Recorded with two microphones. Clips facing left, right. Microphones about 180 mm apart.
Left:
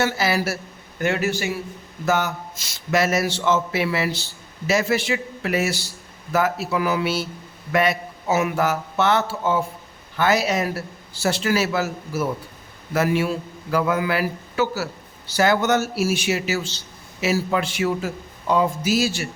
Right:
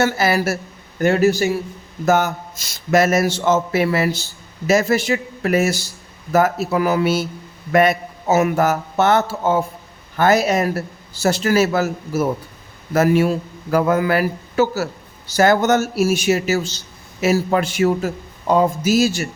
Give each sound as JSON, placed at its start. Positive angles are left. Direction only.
{"t": 0.0, "sound": "speech", "side_deg": -50}